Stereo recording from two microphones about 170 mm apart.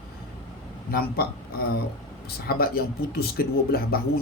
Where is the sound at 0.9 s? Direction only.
65° left (ahead or behind).